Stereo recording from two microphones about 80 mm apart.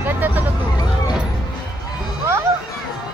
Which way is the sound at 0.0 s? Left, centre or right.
Right.